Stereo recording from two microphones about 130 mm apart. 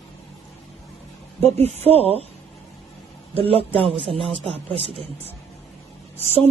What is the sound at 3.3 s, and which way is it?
Speech, 45° right (ahead or behind).